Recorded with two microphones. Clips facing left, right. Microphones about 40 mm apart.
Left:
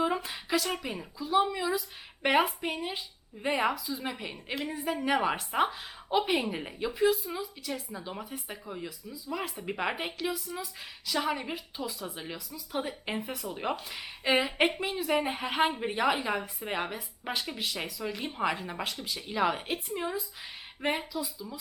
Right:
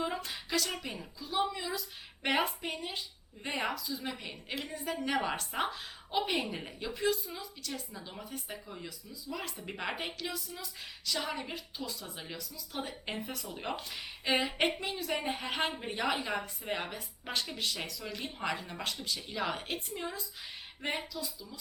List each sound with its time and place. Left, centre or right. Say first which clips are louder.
0.0 s a woman's voice: left 6 dB; centre